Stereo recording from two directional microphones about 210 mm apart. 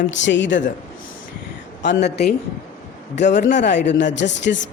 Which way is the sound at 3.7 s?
55° left (ahead or behind).